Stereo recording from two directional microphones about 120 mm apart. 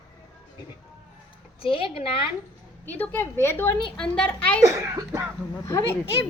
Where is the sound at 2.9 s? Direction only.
15° left (ahead or behind).